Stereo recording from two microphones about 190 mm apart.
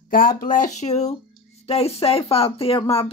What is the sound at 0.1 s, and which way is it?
Speech, 45° left (ahead or behind).